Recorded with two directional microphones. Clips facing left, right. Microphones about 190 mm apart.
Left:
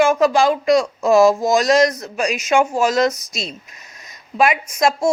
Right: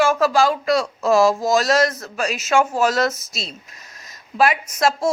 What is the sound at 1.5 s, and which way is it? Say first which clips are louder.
Speech: left 3 dB; 15° left (ahead or behind).